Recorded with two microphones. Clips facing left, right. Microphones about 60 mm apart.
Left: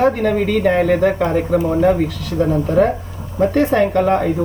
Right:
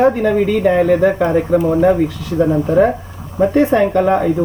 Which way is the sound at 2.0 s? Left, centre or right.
Centre.